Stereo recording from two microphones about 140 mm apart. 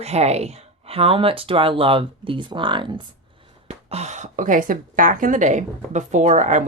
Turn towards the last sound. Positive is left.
turn(degrees=-60)  # may be behind; listen again after turning